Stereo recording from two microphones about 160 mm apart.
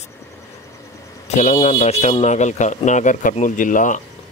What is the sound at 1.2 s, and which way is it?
Speech, 45° left (ahead or behind).